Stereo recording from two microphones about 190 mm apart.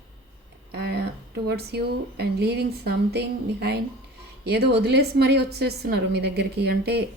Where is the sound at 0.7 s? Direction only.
60° right (ahead or behind).